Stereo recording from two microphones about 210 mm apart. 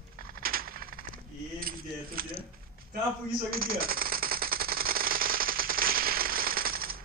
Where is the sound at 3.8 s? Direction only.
45° right (ahead or behind).